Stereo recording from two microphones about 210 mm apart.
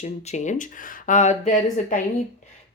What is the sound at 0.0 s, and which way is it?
Speech, 35° left (ahead or behind).